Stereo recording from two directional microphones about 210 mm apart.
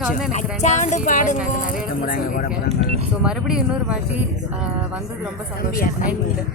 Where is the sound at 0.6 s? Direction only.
35° left (ahead or behind).